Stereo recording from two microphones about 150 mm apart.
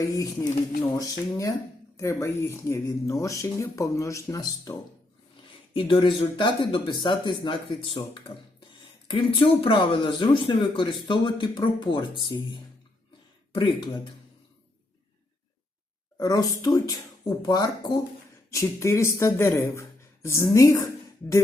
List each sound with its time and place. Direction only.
0.9 s speech: 20° left (ahead or behind)
5.7 s speech: 35° left (ahead or behind)
16.1 s speech: 25° left (ahead or behind)